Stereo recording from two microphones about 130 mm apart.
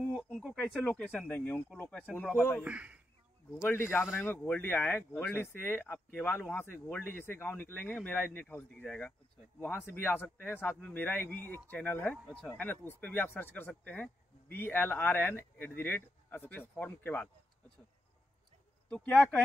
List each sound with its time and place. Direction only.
0.0 s speech: 5° left (ahead or behind)
2.6 s speech: 10° right (ahead or behind)
3.6 s speech: 20° left (ahead or behind)
18.9 s speech: 5° left (ahead or behind)